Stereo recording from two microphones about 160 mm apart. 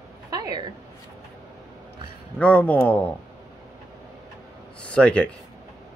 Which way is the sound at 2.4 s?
10° left (ahead or behind).